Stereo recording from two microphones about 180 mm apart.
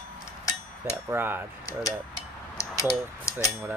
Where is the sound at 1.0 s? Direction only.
10° right (ahead or behind).